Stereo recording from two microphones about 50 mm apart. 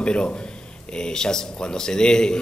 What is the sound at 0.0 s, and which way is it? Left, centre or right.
A man's voice, centre.